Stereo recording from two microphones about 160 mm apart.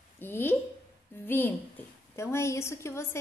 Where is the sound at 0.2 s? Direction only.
15° left (ahead or behind).